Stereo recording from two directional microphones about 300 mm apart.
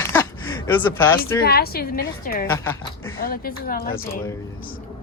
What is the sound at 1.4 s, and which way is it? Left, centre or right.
A woman's voice, left.